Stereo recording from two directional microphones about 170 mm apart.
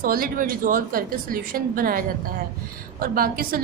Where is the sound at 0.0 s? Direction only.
55° right (ahead or behind).